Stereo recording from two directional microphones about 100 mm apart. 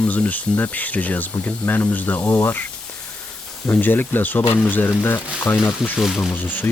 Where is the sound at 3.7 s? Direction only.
20° left (ahead or behind).